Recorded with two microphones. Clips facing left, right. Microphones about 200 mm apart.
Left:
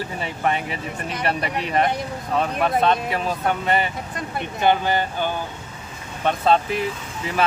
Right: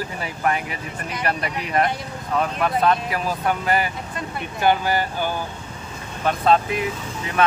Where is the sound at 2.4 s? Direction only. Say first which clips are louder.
Left 1 dB; 25° left (ahead or behind).